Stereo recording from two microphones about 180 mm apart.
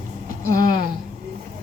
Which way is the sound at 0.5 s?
55° right (ahead or behind).